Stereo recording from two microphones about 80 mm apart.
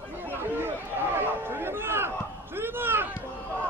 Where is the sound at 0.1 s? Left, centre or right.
Right.